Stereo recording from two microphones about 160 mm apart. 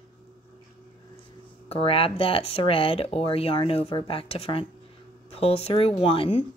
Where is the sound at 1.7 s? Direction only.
35° left (ahead or behind).